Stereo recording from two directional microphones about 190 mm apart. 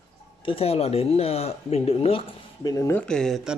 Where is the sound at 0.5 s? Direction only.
30° left (ahead or behind).